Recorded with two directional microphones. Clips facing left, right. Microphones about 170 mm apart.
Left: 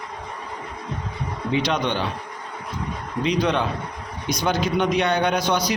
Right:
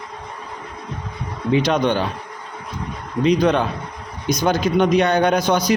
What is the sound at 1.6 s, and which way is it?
Speech, 45° right (ahead or behind).